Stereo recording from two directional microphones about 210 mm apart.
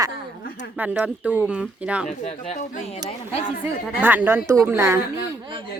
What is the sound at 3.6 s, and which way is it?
A woman's voice, 10° right (ahead or behind).